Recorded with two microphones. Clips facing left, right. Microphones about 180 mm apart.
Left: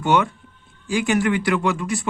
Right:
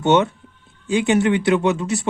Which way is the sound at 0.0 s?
25° right (ahead or behind).